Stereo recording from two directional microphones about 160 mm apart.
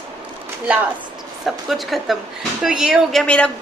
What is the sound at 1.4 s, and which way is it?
A woman's voice, centre (ahead or behind).